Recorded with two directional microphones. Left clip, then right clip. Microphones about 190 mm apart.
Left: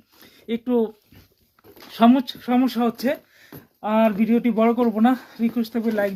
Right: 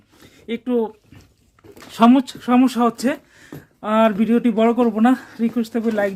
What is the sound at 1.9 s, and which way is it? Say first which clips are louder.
Speech: right 3 dB; 10° right (ahead or behind).